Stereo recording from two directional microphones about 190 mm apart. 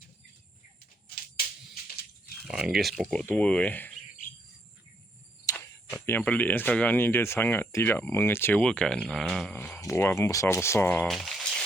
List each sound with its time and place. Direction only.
2.4 s speech: centre (ahead or behind)
5.5 s cricket: 20° left (ahead or behind)
5.9 s speech: 10° left (ahead or behind)